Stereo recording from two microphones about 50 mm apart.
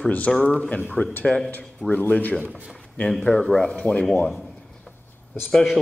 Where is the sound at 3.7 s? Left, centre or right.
Left.